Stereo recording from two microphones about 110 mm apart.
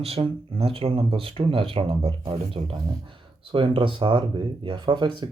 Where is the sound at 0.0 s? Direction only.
65° right (ahead or behind).